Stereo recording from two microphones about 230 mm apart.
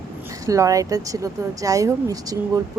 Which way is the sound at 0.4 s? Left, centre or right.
Centre.